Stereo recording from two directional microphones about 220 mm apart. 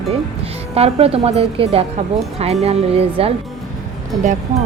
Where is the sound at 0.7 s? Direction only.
25° right (ahead or behind).